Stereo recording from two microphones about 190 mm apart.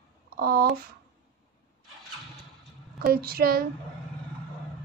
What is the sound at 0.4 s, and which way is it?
Speech, 50° right (ahead or behind).